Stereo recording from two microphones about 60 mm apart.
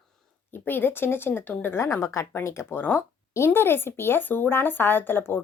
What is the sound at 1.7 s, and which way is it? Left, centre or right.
Speech, left.